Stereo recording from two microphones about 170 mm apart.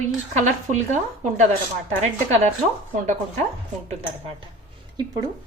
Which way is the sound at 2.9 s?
45° right (ahead or behind).